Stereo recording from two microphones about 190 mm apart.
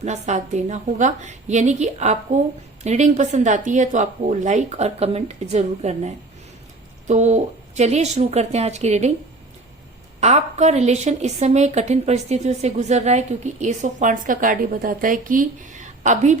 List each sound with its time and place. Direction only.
0.0 s a woman's voice: 40° right (ahead or behind)
10.2 s a woman's voice: 35° right (ahead or behind)